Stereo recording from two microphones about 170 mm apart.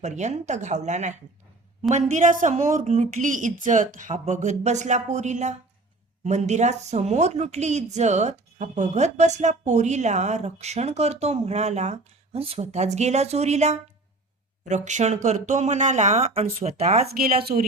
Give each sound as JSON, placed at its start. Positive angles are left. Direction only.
{"t": 0.0, "sound": "a woman's voice", "side_deg": -45}
{"t": 17.1, "sound": "speech", "side_deg": -65}